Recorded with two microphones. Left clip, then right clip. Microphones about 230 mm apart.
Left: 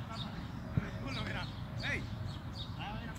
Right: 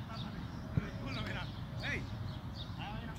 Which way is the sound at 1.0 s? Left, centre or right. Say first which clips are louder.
Left 2 dB; centre.